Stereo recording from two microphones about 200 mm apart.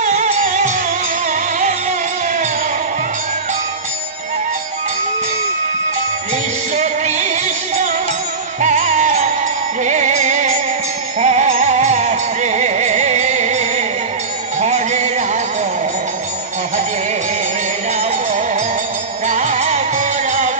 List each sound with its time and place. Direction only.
0.0 s music: 35° right (ahead or behind)
6.8 s music: 35° right (ahead or behind)
19.2 s music: 35° right (ahead or behind)